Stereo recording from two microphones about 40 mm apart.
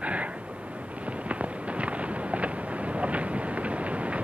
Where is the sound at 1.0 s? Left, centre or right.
Right.